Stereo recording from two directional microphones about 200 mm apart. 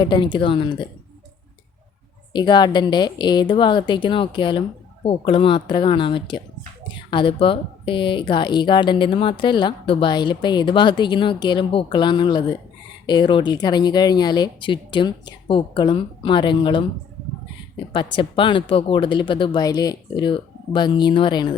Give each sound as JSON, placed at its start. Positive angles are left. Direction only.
{"t": 0.0, "sound": "speech", "side_deg": 20}
{"t": 2.3, "sound": "speech", "side_deg": 20}
{"t": 17.9, "sound": "speech", "side_deg": 25}